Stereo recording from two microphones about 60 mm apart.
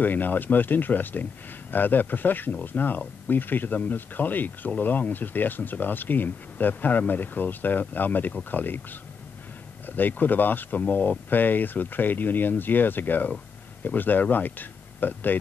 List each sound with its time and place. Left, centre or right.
0.0 s speech: left
9.8 s speech: left